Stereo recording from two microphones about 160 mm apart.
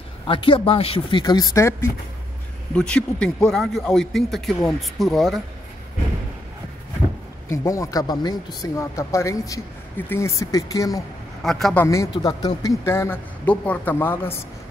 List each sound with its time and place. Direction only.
0.3 s speech: 30° left (ahead or behind); by 1.9 s 15° left (ahead or behind)
2.7 s a man's voice: 5° left (ahead or behind)
7.5 s speech: 20° left (ahead or behind)
11.4 s a man's voice: 5° left (ahead or behind)
11.8 s a man's voice: 20° left (ahead or behind)